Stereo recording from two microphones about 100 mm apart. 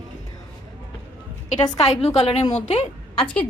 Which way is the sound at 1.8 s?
90° left.